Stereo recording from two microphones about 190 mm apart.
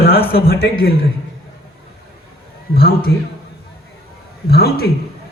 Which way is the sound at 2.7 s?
50° left (ahead or behind).